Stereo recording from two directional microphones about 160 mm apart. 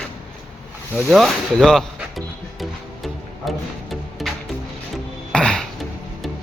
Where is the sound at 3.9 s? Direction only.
Centre (ahead or behind).